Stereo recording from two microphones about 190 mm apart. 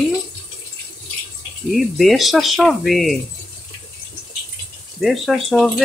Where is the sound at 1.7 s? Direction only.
Centre (ahead or behind).